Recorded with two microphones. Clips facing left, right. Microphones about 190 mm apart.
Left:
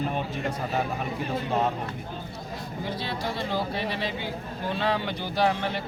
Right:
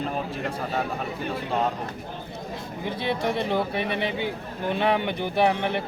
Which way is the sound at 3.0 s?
20° right (ahead or behind).